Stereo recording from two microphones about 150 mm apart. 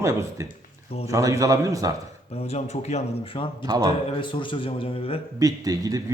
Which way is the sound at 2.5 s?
45° left (ahead or behind).